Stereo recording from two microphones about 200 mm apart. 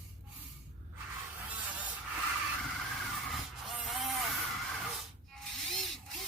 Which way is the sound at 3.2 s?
Centre (ahead or behind).